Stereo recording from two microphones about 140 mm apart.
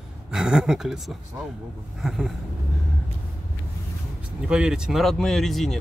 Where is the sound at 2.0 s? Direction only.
Centre (ahead or behind).